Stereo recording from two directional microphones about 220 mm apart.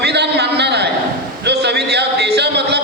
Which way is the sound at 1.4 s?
50° right (ahead or behind).